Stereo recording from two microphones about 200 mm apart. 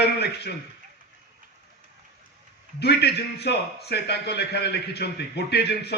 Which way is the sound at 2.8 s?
55° left (ahead or behind).